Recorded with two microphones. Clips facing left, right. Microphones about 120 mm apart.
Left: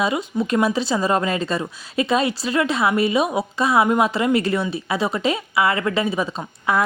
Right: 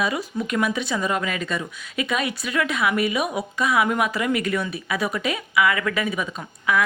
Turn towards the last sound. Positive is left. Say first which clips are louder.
# left 2 dB
turn(degrees=35)  # may be behind; listen again after turning